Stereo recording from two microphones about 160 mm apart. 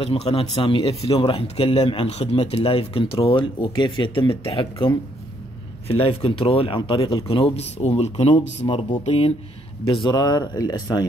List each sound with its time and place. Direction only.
0.0 s speech: 40° left (ahead or behind)